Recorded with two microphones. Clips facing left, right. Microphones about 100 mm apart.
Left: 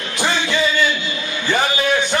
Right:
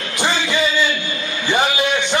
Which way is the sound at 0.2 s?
15° right (ahead or behind).